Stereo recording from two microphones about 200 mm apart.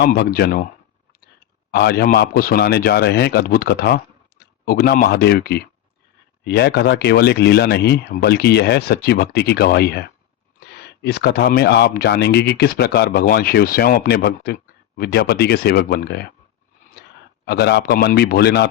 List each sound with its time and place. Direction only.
0.0 s speech: 50° left (ahead or behind)
1.7 s speech: 55° left (ahead or behind)
17.4 s speech: 55° left (ahead or behind)